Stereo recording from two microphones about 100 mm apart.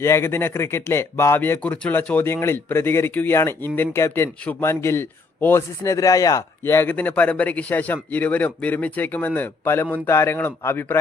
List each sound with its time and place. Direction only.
0.0 s speech: 25° left (ahead or behind)
6.6 s speech: 25° left (ahead or behind)